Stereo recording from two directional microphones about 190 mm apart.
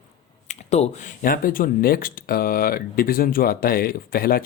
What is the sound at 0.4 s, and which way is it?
Speech, 35° left (ahead or behind).